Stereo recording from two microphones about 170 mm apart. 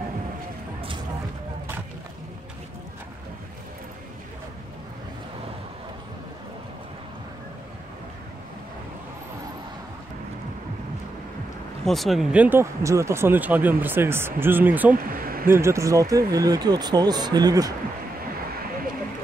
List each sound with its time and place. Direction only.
11.8 s speech: centre (ahead or behind)
15.0 s speech: 55° right (ahead or behind)
15.4 s speech: 15° right (ahead or behind)